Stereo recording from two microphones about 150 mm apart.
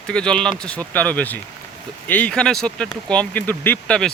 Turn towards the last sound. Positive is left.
turn(degrees=10)  # may be behind; listen again after turning